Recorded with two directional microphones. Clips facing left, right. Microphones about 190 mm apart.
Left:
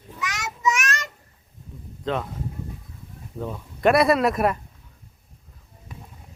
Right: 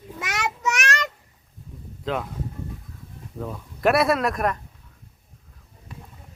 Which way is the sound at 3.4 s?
Centre (ahead or behind).